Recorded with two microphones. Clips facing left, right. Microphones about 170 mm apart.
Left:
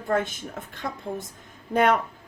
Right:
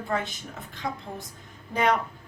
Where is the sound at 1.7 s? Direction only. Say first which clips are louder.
Left 4 dB; 55° left (ahead or behind).